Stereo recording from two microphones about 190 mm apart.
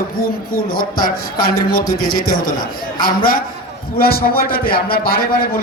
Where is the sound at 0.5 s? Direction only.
50° left (ahead or behind).